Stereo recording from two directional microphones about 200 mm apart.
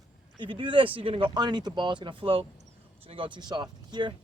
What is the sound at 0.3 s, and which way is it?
Speech, 25° right (ahead or behind).